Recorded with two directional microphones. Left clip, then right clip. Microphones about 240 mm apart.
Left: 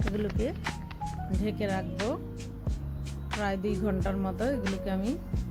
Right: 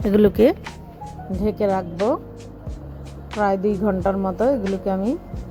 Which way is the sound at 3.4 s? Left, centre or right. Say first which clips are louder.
Right 13 dB; centre.